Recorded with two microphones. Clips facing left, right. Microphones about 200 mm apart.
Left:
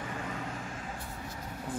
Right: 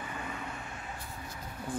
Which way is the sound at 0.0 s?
90° left.